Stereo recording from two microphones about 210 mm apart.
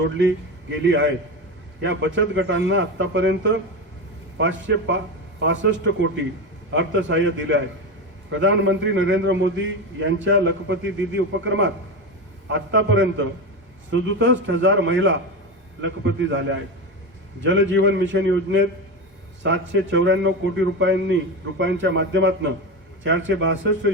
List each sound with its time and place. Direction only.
0.2 s a man's voice: 60° right (ahead or behind)